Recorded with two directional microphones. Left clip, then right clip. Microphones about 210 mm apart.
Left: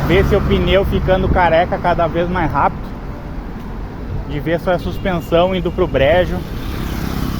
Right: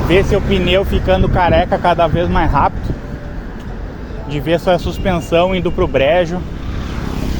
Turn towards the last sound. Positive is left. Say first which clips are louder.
# right 1 dB
turn(degrees=-5)  # may be behind; listen again after turning